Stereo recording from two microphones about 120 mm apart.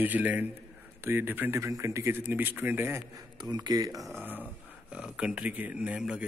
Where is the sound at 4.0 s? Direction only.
Centre (ahead or behind).